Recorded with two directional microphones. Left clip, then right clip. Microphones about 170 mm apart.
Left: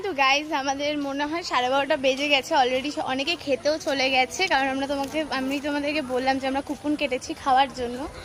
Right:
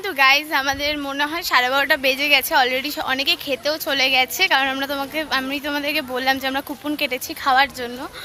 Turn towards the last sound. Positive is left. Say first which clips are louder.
# right 4 dB
turn(degrees=-5)  # may be behind; listen again after turning